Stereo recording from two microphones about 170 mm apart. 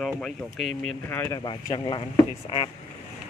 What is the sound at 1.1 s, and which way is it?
Speech, 10° left (ahead or behind).